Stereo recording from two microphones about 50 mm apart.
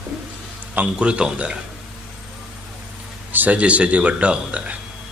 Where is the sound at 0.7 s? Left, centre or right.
Right.